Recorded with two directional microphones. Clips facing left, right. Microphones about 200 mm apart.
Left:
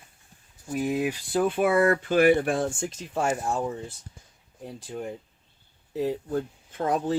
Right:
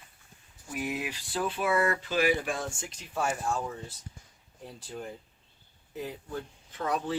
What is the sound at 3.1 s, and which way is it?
Speech, 25° left (ahead or behind).